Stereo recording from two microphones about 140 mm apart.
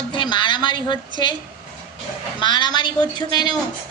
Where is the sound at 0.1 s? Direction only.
35° left (ahead or behind).